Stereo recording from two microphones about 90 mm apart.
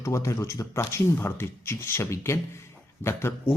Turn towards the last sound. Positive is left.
turn(degrees=25)  # may be behind; listen again after turning